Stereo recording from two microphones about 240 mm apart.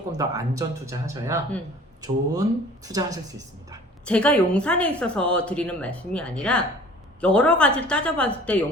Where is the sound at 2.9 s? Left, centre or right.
Centre.